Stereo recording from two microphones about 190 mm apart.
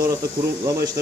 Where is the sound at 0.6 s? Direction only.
20° right (ahead or behind).